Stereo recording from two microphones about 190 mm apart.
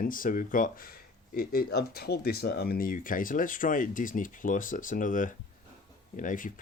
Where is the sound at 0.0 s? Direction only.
45° left (ahead or behind).